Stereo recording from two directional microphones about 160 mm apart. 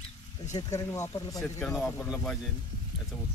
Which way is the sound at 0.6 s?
20° left (ahead or behind).